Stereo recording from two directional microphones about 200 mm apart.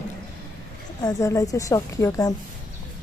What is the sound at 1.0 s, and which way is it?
A woman's voice, 15° left (ahead or behind).